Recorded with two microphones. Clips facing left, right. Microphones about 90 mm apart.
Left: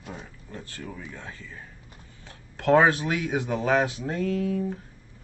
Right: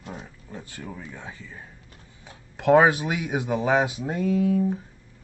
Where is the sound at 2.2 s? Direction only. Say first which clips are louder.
Right 3 dB; 15° right (ahead or behind).